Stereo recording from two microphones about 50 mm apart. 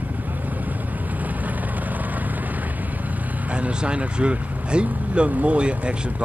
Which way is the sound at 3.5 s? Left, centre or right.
Right.